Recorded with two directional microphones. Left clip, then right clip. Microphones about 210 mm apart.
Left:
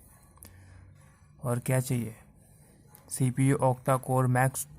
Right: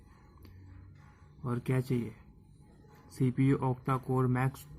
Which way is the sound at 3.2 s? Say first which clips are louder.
Left 4 dB; 50° left (ahead or behind).